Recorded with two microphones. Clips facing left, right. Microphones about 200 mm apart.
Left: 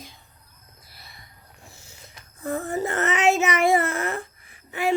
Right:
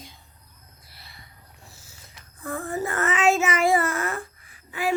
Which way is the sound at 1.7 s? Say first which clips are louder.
Left 2 dB; 20° left (ahead or behind).